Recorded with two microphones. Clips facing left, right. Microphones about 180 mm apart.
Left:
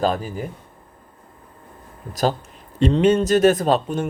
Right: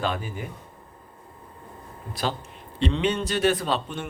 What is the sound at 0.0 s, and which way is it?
Speech, 40° left (ahead or behind).